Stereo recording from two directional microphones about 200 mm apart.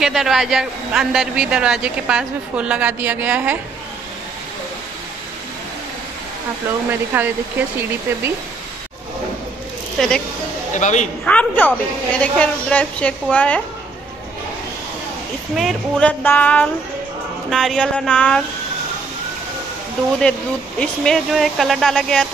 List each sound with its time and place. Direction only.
0.0 s a man's voice: centre (ahead or behind)
6.9 s speech: 10° right (ahead or behind)
9.9 s speech: 5° left (ahead or behind)
10.7 s a man's voice: 35° left (ahead or behind)
11.2 s a woman's voice: 10° left (ahead or behind)
15.5 s a woman's voice: 5° left (ahead or behind)
20.8 s a man's voice: 5° left (ahead or behind)